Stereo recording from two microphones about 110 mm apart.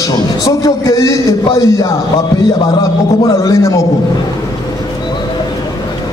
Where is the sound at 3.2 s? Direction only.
30° left (ahead or behind).